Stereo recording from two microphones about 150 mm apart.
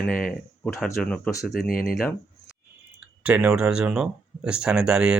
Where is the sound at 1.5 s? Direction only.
75° left (ahead or behind).